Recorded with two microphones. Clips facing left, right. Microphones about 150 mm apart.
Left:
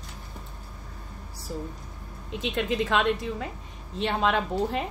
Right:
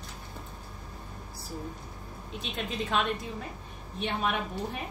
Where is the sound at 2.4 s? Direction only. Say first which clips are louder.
Left 8 dB; 90° left.